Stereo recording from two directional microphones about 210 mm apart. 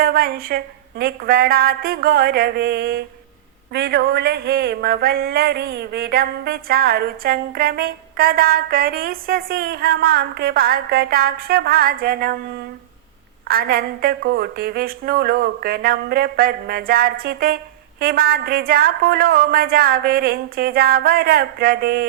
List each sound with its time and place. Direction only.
0.0 s speech: 45° right (ahead or behind)
13.5 s speech: 45° right (ahead or behind)